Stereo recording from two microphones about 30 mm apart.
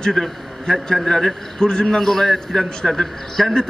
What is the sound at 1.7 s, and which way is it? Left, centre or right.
Speech, left.